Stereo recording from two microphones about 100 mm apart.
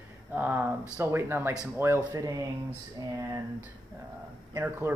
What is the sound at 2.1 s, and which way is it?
Speech, 35° right (ahead or behind).